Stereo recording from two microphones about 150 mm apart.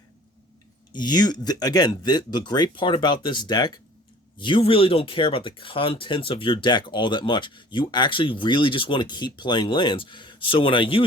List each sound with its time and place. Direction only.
0.9 s speech: 30° left (ahead or behind)